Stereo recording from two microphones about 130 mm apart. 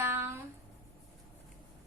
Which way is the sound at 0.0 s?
20° right (ahead or behind).